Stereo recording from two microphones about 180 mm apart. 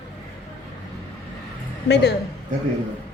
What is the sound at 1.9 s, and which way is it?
Speech, 65° left (ahead or behind).